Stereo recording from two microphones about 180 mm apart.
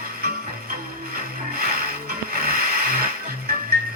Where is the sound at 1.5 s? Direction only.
55° right (ahead or behind).